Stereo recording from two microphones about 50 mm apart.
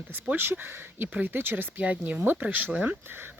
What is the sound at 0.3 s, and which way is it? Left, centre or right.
Speech, right.